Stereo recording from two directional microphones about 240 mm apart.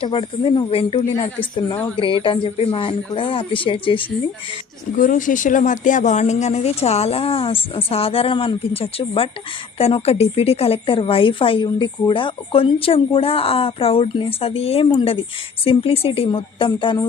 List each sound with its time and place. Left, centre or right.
0.0 s a woman's voice: left
4.9 s a woman's voice: left